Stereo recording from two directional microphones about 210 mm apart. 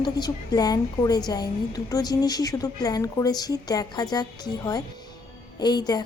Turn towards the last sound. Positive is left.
turn(degrees=20)  # may be behind; listen again after turning